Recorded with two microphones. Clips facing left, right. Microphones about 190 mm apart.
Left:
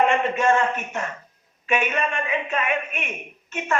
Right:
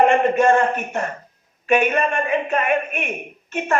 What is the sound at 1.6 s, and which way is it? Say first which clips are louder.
A woman's voice: right 6 dB; 50° right (ahead or behind).